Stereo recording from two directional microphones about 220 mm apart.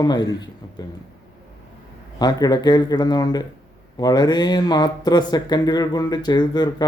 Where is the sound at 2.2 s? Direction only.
20° left (ahead or behind).